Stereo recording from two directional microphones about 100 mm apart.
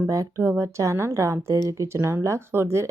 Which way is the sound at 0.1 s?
30° right (ahead or behind).